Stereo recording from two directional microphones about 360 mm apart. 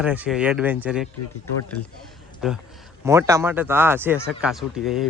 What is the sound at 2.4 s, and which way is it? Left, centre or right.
Speech, centre.